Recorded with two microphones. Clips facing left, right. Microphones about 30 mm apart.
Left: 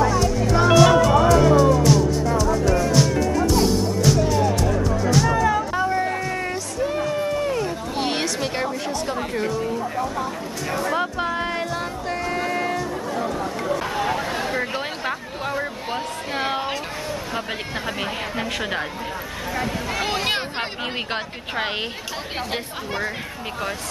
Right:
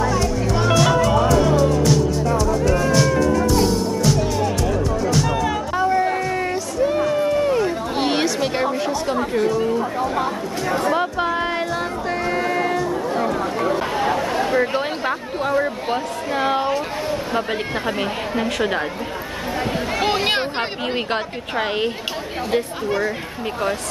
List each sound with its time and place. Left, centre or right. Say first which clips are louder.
0.7 s music: left 3 dB; centre
5.4 s music: even; centre
8.1 s a sound: right 5 dB; centre
8.8 s chatter: right 4 dB; centre
9.5 s a sound: right 5 dB; centre
9.8 s a sound: right 4 dB; right
10.9 s music: right 2 dB; centre
13.1 s chatter: right 4 dB; right
14.6 s a sound: right 5 dB; centre
17.8 s a woman's voice: right 4 dB; centre
20.0 s speech: right 4 dB; centre
22.8 s a woman's voice: right 3 dB; centre